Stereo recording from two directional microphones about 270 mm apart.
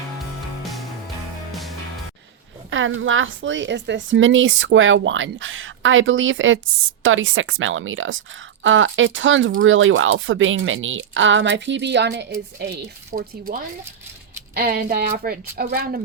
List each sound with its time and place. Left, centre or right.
2.6 s a woman's voice: right